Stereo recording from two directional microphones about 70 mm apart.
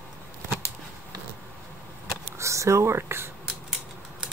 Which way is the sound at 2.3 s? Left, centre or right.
Right.